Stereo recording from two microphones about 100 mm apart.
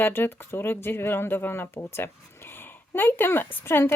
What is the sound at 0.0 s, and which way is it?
Speech, 20° left (ahead or behind).